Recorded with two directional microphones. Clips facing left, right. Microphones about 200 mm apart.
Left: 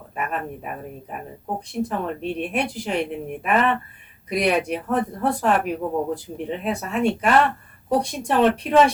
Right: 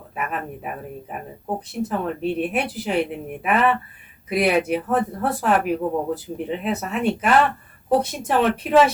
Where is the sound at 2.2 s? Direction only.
5° right (ahead or behind).